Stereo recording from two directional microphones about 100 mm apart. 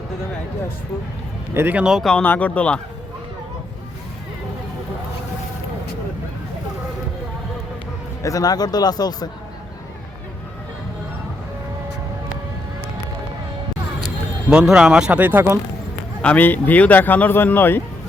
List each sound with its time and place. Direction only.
1.5 s speech: 20° right (ahead or behind)
1.8 s speech: 5° right (ahead or behind)
2.2 s speech: 15° left (ahead or behind)
8.2 s speech: 35° left (ahead or behind)
14.5 s speech: 10° right (ahead or behind)
16.2 s speech: 15° left (ahead or behind)